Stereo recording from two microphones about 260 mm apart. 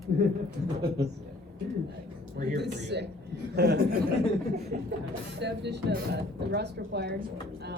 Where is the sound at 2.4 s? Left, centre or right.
Right.